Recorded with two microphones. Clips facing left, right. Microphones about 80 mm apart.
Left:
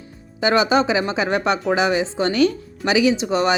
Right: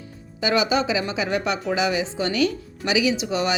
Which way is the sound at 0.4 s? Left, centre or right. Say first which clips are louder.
Left 4 dB; left.